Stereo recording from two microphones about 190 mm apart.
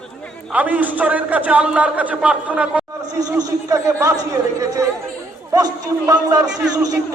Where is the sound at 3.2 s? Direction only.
20° right (ahead or behind).